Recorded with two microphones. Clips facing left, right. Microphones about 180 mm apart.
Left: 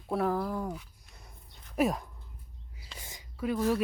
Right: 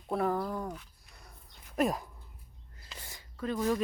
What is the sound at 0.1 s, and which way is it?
Speech, centre (ahead or behind).